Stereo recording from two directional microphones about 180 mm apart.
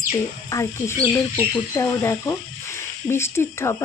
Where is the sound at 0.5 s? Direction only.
15° left (ahead or behind).